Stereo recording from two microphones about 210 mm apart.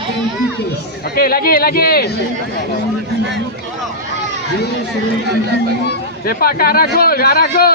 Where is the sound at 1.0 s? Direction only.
45° left (ahead or behind).